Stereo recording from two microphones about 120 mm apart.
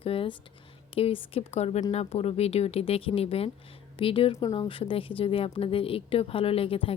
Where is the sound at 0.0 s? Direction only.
50° left (ahead or behind).